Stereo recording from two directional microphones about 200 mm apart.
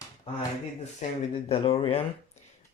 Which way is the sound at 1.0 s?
35° left (ahead or behind).